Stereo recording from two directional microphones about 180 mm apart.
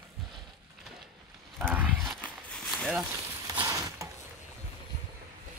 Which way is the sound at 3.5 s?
20° right (ahead or behind).